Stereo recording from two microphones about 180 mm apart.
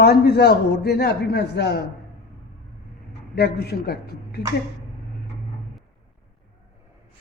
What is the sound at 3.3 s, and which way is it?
A man's voice, 65° left (ahead or behind).